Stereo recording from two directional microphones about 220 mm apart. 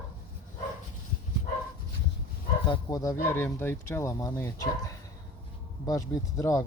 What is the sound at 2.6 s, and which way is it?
Speech, 20° left (ahead or behind).